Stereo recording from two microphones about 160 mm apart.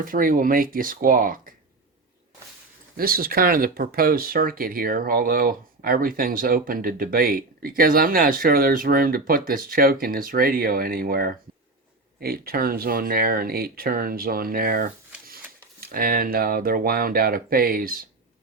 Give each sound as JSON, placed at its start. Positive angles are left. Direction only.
{"t": 0.0, "sound": "speech", "side_deg": -60}
{"t": 3.0, "sound": "speech", "side_deg": -65}